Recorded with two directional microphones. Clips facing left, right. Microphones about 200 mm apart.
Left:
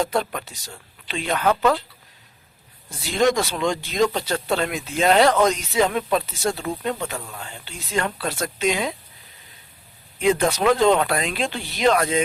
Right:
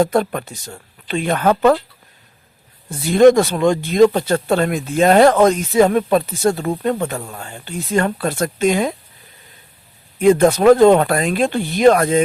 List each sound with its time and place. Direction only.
0.0 s speech: 50° right (ahead or behind)
2.9 s speech: 55° right (ahead or behind)
10.2 s speech: 50° right (ahead or behind)